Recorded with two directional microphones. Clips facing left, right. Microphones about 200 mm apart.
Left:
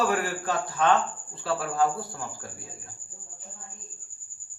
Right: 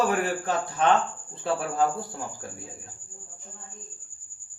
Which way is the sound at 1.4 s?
20° right (ahead or behind).